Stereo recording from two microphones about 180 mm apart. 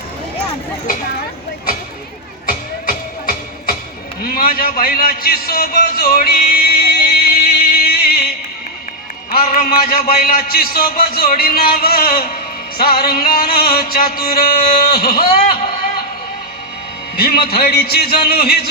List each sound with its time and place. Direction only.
2.5 s music: 55° left (ahead or behind)
4.2 s a sound: 55° left (ahead or behind)
9.3 s a man's voice: 55° left (ahead or behind)
17.4 s a man's voice: 55° left (ahead or behind)